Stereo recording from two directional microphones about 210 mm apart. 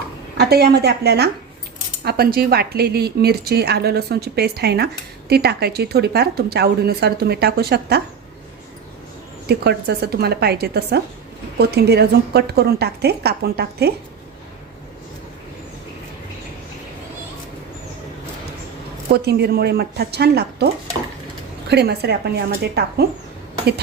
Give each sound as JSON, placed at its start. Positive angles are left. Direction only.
{"t": 0.3, "sound": "a woman's voice", "side_deg": -50}
{"t": 9.5, "sound": "a woman's voice", "side_deg": -50}
{"t": 19.1, "sound": "a woman's voice", "side_deg": -50}
{"t": 21.7, "sound": "a woman's voice", "side_deg": -50}